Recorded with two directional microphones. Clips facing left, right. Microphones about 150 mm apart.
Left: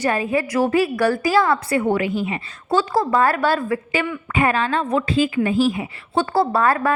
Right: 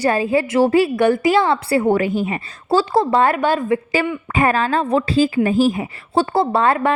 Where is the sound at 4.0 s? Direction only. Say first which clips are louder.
Right 2 dB; 35° right (ahead or behind).